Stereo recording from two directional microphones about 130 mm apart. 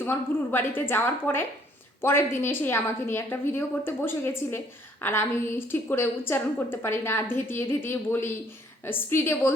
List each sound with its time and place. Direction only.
0.0 s a woman's voice: 15° left (ahead or behind)